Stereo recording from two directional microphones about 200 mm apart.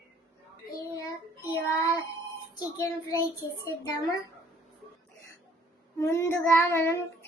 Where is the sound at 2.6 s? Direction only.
20° left (ahead or behind).